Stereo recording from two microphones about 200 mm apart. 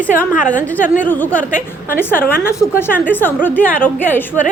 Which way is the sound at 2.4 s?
15° left (ahead or behind).